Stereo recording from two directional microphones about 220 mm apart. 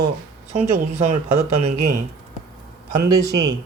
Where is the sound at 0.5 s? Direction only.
30° right (ahead or behind).